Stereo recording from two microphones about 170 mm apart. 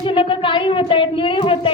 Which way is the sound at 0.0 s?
30° left (ahead or behind).